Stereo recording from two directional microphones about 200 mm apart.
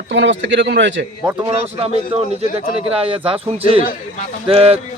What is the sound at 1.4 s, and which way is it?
A man's voice, 30° right (ahead or behind).